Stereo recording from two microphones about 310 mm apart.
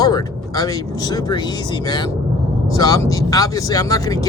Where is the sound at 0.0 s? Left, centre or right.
Centre.